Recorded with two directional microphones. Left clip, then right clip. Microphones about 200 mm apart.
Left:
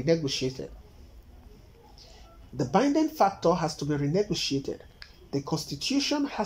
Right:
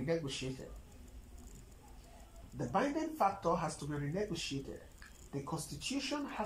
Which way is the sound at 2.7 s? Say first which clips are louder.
Left 11 dB; 35° left (ahead or behind).